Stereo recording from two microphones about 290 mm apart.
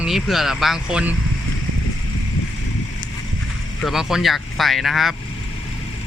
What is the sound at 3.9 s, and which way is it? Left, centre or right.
Speech, centre.